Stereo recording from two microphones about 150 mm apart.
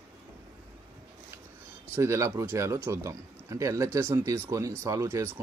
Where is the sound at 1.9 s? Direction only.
20° right (ahead or behind).